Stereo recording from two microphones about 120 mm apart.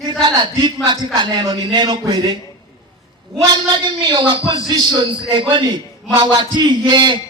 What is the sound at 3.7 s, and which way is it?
A man's voice, 45° right (ahead or behind).